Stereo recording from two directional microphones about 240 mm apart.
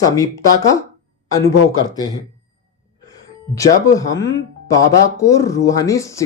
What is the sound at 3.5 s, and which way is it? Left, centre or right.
Speech, centre.